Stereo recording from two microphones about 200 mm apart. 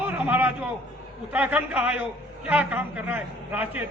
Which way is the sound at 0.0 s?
10° right (ahead or behind).